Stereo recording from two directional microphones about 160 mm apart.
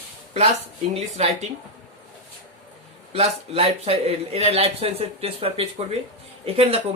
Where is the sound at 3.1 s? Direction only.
40° right (ahead or behind).